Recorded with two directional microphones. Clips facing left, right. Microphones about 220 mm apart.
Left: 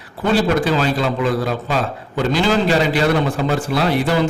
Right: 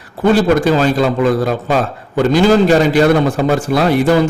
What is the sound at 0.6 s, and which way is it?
A man's voice, 45° right (ahead or behind).